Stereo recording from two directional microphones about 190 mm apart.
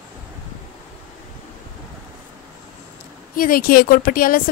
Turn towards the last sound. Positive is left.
turn(degrees=50)  # may be behind; listen again after turning